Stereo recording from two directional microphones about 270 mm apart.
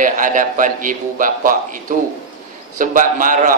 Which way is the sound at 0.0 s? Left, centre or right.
Right.